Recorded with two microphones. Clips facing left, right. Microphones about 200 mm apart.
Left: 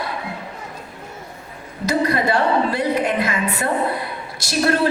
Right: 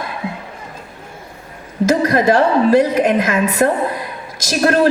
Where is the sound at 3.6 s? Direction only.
45° right (ahead or behind).